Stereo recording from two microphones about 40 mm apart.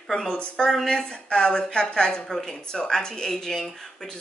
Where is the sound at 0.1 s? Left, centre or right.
Left.